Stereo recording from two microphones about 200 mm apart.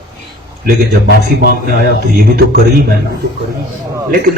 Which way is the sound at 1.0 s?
55° left (ahead or behind).